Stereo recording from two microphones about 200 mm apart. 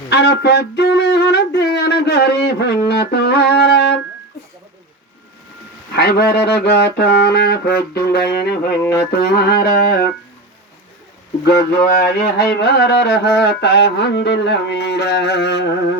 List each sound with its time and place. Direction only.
0.1 s speech: 55° left (ahead or behind)
6.0 s music: 55° left (ahead or behind)
11.4 s speech: 55° left (ahead or behind)